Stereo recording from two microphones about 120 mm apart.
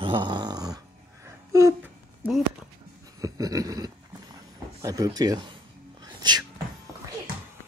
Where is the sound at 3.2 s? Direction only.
30° right (ahead or behind).